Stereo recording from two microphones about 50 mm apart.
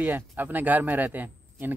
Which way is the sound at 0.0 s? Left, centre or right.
Right.